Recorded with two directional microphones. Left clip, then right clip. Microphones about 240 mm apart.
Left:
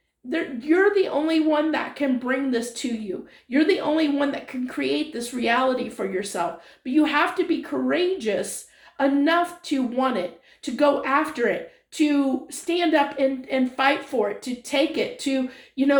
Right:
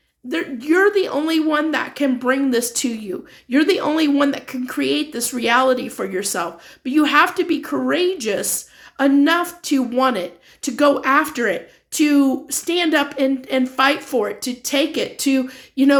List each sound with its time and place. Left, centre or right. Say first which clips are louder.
0.3 s a woman's voice: right 3 dB; right